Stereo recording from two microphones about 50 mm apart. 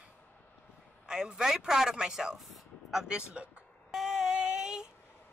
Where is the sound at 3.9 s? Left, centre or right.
Centre.